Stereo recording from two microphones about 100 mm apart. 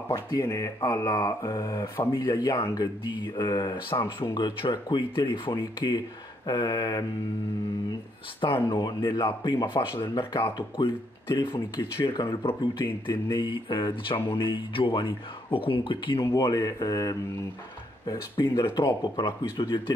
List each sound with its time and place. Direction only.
0.1 s speech: 40° left (ahead or behind)
8.4 s speech: 60° left (ahead or behind)
8.6 s speech: 45° left (ahead or behind)
16.2 s speech: 35° left (ahead or behind)
19.1 s speech: 55° left (ahead or behind)